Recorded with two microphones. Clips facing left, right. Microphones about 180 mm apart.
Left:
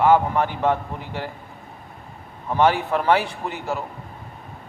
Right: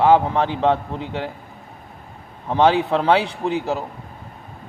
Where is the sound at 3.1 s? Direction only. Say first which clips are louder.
Right 3 dB; 70° right (ahead or behind).